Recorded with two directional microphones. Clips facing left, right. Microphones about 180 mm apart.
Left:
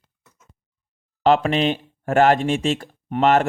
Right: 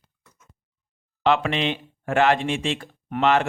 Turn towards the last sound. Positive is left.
turn(degrees=45)  # may be behind; listen again after turning